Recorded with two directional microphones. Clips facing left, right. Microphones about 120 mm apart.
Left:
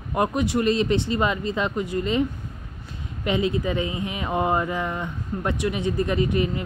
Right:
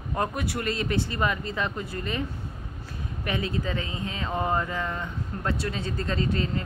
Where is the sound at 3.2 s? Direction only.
20° left (ahead or behind).